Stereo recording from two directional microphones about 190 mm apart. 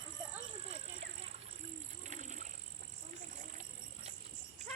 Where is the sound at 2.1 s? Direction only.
40° right (ahead or behind).